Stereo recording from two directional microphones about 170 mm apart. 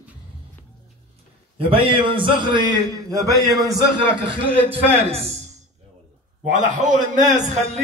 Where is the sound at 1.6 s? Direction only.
30° right (ahead or behind).